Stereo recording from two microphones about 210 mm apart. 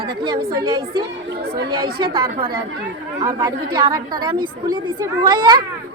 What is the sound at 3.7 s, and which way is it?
Speech, 25° right (ahead or behind).